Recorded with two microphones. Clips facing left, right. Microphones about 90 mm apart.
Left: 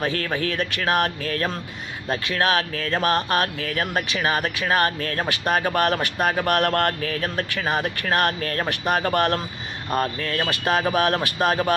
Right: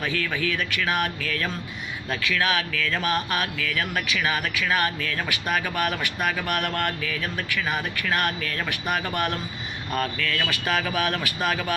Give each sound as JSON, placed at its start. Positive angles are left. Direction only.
{"t": 0.0, "sound": "speech", "side_deg": 40}
{"t": 11.0, "sound": "speech", "side_deg": 50}
{"t": 11.4, "sound": "speech", "side_deg": 35}